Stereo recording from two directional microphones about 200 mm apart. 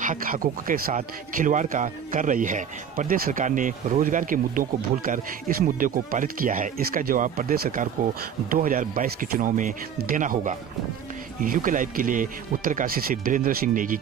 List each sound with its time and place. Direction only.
0.0 s a man's voice: 40° right (ahead or behind)